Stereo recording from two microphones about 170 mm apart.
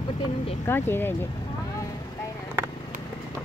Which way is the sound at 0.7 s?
10° left (ahead or behind).